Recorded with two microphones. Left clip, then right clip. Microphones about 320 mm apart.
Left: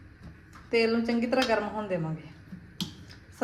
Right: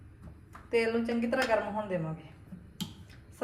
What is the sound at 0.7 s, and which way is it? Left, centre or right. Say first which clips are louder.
Speech: left 3 dB; left.